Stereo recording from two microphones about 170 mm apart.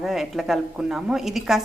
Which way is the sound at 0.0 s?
Centre (ahead or behind).